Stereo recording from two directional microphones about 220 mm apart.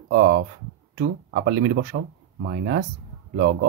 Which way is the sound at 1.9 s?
60° right (ahead or behind).